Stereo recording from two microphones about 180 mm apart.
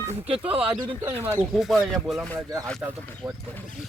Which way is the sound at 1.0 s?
10° right (ahead or behind).